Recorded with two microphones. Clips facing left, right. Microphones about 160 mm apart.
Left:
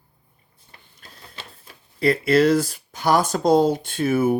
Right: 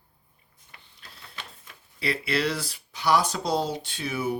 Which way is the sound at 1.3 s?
30° left (ahead or behind).